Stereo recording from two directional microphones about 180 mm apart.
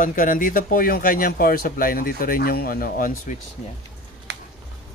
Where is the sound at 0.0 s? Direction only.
50° left (ahead or behind).